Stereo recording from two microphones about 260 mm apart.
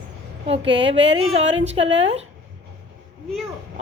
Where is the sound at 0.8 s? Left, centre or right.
Right.